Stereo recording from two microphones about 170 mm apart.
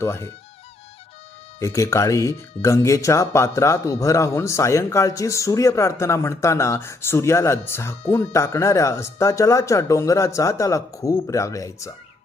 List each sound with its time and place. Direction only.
0.0 s speech: 15° left (ahead or behind)
1.5 s speech: 15° left (ahead or behind)